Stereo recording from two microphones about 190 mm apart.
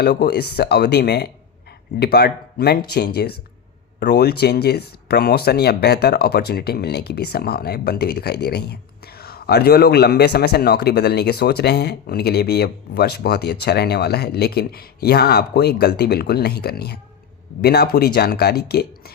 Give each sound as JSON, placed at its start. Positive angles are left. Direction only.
{"t": 0.0, "sound": "speech", "side_deg": 60}